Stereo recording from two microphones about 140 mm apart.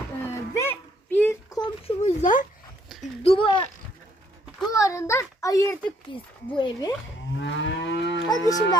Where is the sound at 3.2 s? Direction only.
40° left (ahead or behind).